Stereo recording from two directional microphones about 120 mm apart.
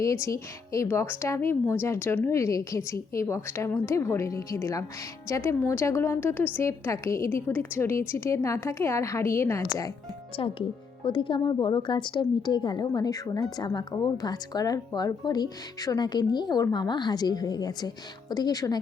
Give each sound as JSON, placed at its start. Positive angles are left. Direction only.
{"t": 0.0, "sound": "a woman's voice", "side_deg": 25}
{"t": 10.4, "sound": "speech", "side_deg": 50}